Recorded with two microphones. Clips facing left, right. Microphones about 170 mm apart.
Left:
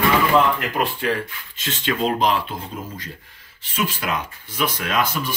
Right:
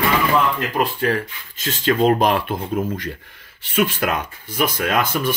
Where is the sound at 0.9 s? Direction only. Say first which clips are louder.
Right 3 dB; 45° right (ahead or behind).